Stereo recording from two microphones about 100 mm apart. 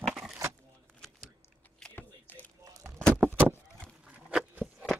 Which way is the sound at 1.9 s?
20° left (ahead or behind).